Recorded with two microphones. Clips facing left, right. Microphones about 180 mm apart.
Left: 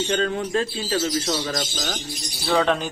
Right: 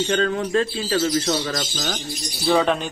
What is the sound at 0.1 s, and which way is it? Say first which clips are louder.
Speech: right 2 dB; 80° right.